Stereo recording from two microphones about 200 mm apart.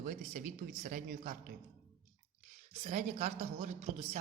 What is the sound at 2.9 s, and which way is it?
Speech, 35° right (ahead or behind).